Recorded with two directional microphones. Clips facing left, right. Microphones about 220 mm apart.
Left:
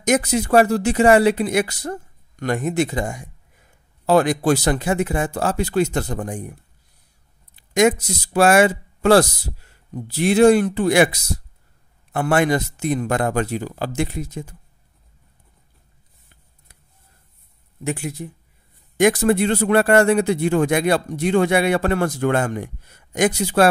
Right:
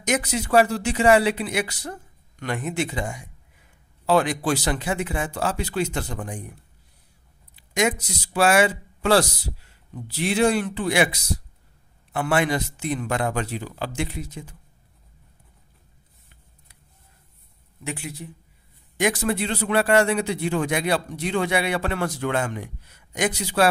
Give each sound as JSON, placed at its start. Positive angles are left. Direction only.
{"t": 0.0, "sound": "a man's voice", "side_deg": 45}
{"t": 7.5, "sound": "a man's voice", "side_deg": 45}
{"t": 12.1, "sound": "a man's voice", "side_deg": 45}
{"t": 17.8, "sound": "a man's voice", "side_deg": 45}